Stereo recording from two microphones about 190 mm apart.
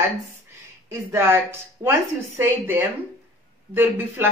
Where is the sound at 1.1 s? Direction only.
15° right (ahead or behind).